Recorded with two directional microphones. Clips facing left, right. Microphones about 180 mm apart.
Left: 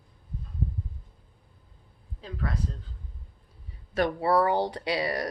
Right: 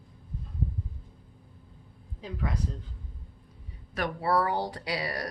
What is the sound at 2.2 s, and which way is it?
Speech, 15° right (ahead or behind).